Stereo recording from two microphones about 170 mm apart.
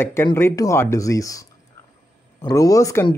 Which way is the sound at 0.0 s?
15° left (ahead or behind).